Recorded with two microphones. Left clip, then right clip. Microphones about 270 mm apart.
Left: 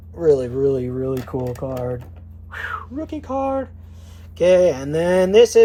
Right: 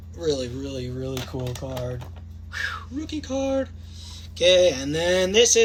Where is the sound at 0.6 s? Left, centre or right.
Left.